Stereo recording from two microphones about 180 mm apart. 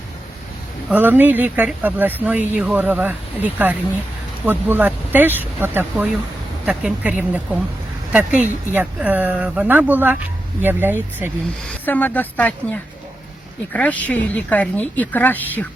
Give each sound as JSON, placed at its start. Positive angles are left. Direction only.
{"t": 0.9, "sound": "speech", "side_deg": -10}
{"t": 11.9, "sound": "speech", "side_deg": 10}